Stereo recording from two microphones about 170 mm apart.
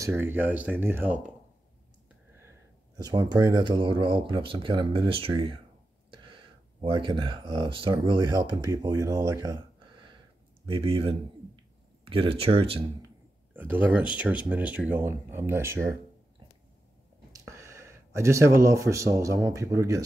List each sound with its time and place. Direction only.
0.0 s speech: 10° right (ahead or behind)
3.0 s a man's voice: 25° right (ahead or behind)
13.0 s speech: 10° right (ahead or behind)
17.3 s speech: 15° right (ahead or behind)